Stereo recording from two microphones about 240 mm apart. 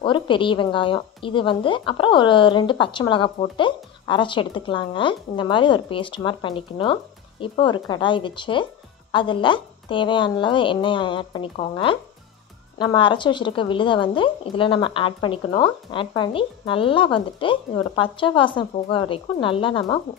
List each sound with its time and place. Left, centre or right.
0.0 s speech: left